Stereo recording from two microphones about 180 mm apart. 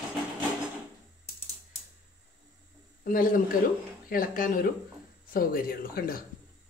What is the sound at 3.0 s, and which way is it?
Speech, 50° left (ahead or behind).